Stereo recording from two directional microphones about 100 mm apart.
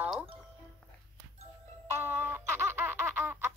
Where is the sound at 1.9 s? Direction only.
20° right (ahead or behind).